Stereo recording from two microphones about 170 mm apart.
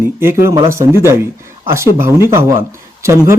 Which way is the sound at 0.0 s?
15° right (ahead or behind).